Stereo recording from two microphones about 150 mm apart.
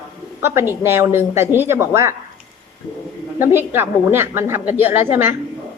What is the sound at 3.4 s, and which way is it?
A woman's voice, 15° right (ahead or behind).